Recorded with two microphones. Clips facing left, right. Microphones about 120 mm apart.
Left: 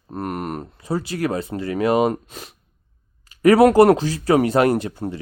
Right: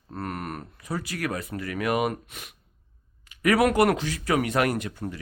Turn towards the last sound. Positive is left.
turn(degrees=30)  # may be behind; listen again after turning